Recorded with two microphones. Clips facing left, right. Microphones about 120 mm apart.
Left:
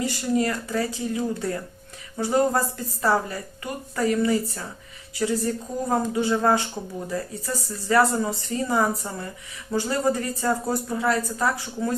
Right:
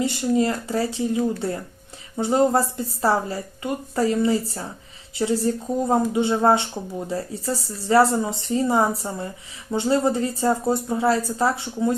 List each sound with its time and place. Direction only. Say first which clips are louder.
0.0 s speech: right 3 dB; 25° right (ahead or behind)